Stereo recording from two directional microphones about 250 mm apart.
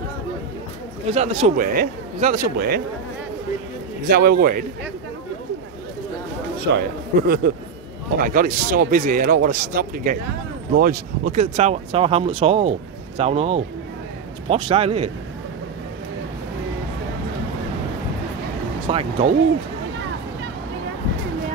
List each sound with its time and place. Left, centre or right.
1.0 s speech: right
4.1 s speech: right
7.2 s speech: right
18.9 s speech: right